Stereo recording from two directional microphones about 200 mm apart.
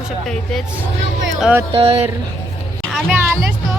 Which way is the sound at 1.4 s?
5° right (ahead or behind).